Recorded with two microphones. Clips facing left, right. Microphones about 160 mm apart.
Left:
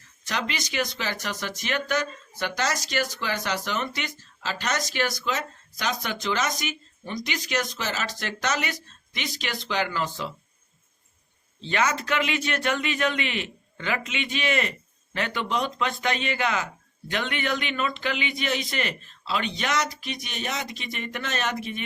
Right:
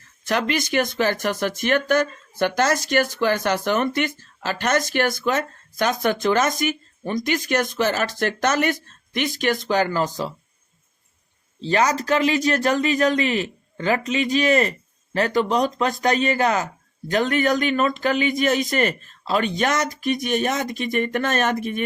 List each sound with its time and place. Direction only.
0.3 s speech: 55° right (ahead or behind)
11.6 s a man's voice: 35° right (ahead or behind)